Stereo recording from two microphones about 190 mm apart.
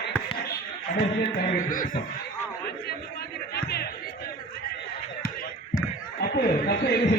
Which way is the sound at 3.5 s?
55° left (ahead or behind).